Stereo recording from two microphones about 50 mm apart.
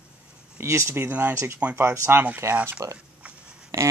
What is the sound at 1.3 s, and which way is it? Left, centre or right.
Speech, right.